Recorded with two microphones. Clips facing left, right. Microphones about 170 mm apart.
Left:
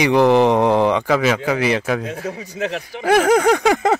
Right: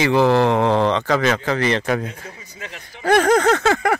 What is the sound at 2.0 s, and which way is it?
Speech, 85° left.